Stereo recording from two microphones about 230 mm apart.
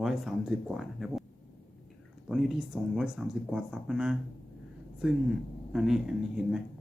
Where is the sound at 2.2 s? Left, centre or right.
Centre.